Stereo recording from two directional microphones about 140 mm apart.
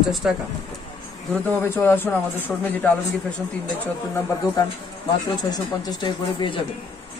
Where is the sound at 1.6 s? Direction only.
15° left (ahead or behind).